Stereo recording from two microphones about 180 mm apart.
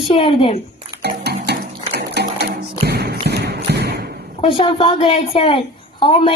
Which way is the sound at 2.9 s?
65° right (ahead or behind).